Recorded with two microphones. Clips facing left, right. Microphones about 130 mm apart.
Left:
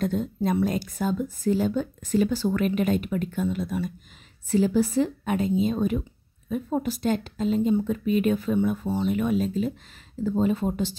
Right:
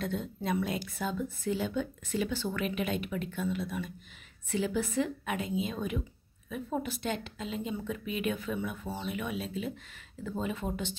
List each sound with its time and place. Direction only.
0.0 s speech: 40° left (ahead or behind)